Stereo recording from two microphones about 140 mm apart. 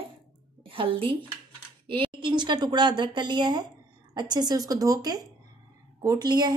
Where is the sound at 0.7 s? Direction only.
40° right (ahead or behind).